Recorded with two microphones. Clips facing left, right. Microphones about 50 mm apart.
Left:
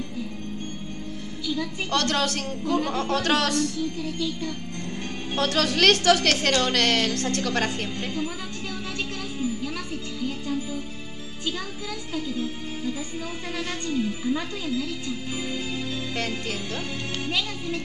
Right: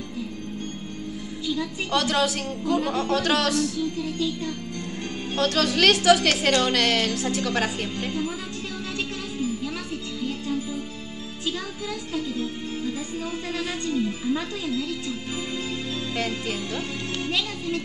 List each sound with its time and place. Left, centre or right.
1.9 s a woman's voice: centre
5.3 s a woman's voice: centre
14.2 s speech: centre